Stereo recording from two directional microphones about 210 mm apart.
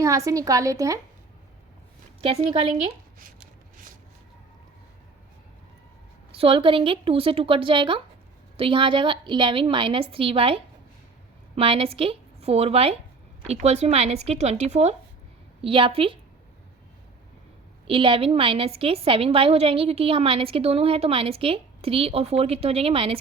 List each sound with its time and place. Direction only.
0.0 s a woman's voice: 15° right (ahead or behind)
2.2 s a woman's voice: 25° right (ahead or behind)
6.3 s a woman's voice: 25° right (ahead or behind)
17.8 s a woman's voice: 25° right (ahead or behind)